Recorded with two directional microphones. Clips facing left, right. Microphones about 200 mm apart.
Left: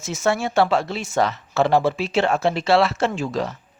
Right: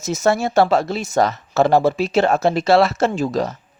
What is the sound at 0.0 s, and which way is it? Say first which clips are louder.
Speech: right 4 dB; 40° right (ahead or behind).